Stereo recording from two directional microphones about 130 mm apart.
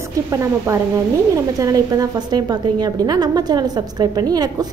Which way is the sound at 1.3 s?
25° right (ahead or behind).